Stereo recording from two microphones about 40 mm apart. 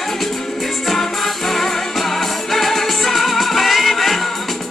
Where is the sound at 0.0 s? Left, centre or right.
Centre.